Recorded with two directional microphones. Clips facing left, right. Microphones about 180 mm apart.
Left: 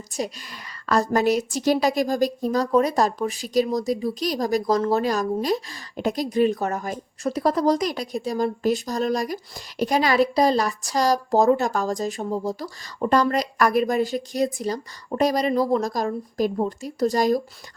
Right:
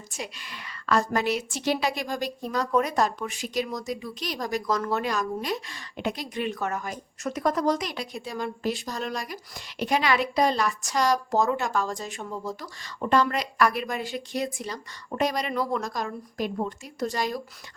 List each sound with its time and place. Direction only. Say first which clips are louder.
0.1 s a woman's voice: left 9 dB; 40° left (ahead or behind)